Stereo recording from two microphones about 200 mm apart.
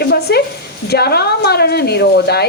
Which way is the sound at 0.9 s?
55° left (ahead or behind).